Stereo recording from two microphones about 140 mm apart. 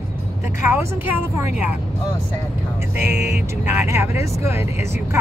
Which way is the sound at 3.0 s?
55° left (ahead or behind).